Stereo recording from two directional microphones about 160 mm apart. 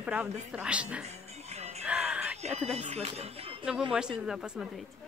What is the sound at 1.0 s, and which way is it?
Music, 40° right (ahead or behind).